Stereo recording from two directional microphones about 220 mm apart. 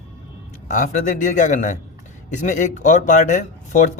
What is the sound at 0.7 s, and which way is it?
Speech, 35° left (ahead or behind).